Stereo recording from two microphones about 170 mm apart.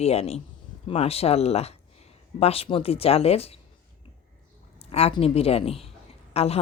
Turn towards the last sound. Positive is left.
turn(degrees=35)  # may be behind; listen again after turning